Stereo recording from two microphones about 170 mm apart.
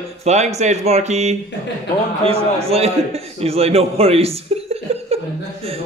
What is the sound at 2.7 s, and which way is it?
A man's voice, 35° right (ahead or behind).